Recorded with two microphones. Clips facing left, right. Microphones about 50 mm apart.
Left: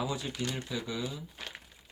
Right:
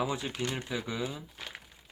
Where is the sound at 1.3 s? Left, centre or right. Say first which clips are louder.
Even; centre.